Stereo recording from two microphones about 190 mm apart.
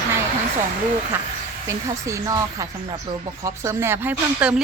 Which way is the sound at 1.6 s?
15° right (ahead or behind).